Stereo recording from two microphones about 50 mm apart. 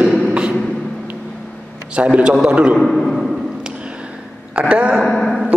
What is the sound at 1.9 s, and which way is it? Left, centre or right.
Speech, right.